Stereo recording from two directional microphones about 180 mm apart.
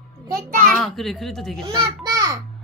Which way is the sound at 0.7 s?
Centre (ahead or behind).